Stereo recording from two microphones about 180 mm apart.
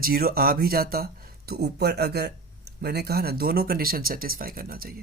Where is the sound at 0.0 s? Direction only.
55° right (ahead or behind).